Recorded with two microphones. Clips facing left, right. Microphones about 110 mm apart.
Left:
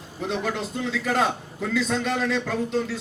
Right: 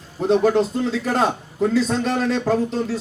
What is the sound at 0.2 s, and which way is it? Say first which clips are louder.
Speech: right 11 dB; 40° right (ahead or behind).